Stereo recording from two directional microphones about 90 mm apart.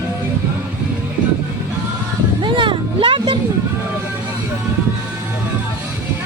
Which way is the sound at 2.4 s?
65° right (ahead or behind).